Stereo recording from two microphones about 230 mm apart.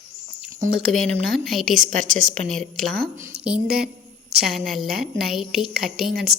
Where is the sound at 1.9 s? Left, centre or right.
Right.